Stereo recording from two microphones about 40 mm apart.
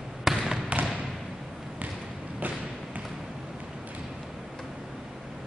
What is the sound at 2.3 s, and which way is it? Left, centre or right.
Thump, right.